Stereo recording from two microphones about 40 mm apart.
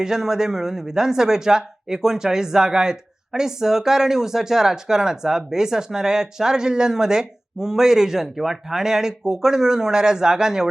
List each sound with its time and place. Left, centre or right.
0.0 s speech: centre